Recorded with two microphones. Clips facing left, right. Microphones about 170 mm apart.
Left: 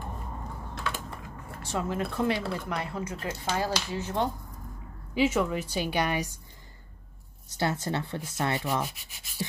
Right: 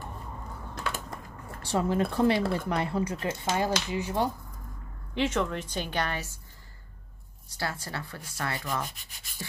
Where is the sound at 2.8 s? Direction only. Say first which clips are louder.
Right 5 dB; 30° right (ahead or behind).